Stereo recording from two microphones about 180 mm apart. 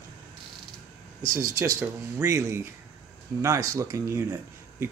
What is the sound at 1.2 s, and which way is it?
Speech, 15° right (ahead or behind).